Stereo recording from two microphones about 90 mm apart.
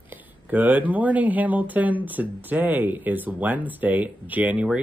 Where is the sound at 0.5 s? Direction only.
20° right (ahead or behind).